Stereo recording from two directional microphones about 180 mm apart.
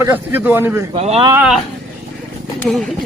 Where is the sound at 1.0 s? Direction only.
35° right (ahead or behind).